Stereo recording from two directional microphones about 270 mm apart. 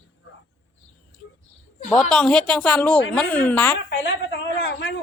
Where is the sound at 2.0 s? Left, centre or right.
Centre.